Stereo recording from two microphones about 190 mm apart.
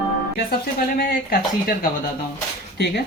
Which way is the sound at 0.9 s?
55° left (ahead or behind).